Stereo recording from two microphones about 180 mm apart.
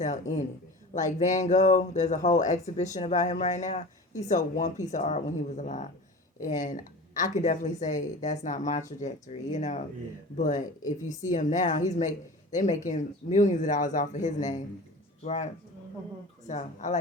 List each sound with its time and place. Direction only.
0.0 s speech: 45° left (ahead or behind)
16.5 s speech: 45° left (ahead or behind)